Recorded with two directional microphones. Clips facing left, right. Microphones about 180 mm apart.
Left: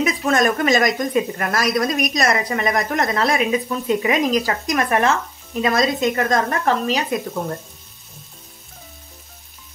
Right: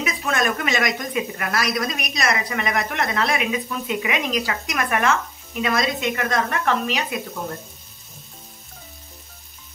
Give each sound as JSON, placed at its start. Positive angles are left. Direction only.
{"t": 0.0, "sound": "a woman's voice", "side_deg": 40}